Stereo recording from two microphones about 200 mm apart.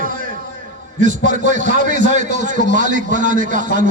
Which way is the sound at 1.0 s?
40° right (ahead or behind).